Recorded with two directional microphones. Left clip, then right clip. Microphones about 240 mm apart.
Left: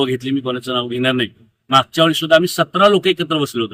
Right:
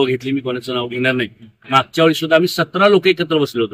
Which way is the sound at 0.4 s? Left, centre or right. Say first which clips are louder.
Left 1 dB; left.